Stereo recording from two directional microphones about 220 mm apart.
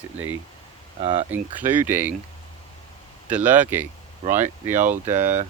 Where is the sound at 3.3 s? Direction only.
5° right (ahead or behind).